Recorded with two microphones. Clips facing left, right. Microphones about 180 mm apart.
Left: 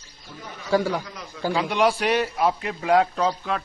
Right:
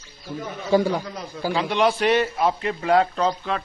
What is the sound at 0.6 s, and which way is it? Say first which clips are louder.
Speech: right 2 dB; 20° right (ahead or behind).